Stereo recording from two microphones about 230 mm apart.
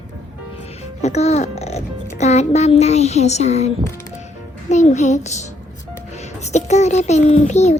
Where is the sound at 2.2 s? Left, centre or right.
Left.